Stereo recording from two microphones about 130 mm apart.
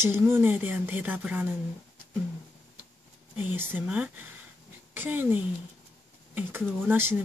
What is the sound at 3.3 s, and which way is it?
Speech, 15° right (ahead or behind).